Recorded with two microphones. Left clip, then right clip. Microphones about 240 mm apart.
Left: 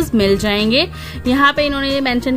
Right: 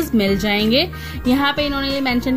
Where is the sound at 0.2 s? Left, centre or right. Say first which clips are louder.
Left 4 dB; left.